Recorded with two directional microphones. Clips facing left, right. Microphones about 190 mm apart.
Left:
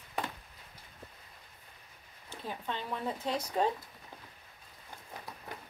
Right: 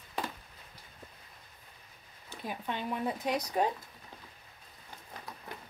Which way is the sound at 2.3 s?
15° right (ahead or behind).